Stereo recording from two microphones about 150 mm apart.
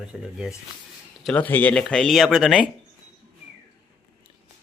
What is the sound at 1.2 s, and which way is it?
Speech, 10° left (ahead or behind).